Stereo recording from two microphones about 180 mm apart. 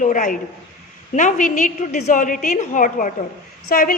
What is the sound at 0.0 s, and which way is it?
A woman's voice, 45° left (ahead or behind).